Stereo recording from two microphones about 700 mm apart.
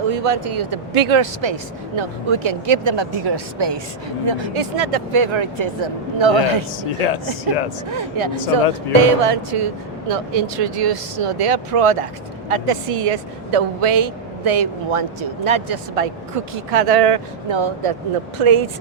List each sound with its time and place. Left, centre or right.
0.1 s speech: right
7.0 s speech: left
7.9 s speech: right